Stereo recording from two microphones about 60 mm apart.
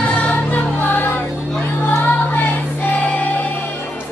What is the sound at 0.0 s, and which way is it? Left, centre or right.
Music, left.